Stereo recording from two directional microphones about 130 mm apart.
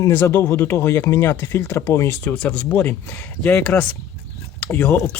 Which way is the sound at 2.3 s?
5° left (ahead or behind).